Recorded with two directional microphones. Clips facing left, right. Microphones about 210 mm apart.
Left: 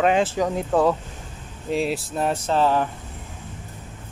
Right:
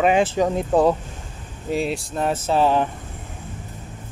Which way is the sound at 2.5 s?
15° right (ahead or behind).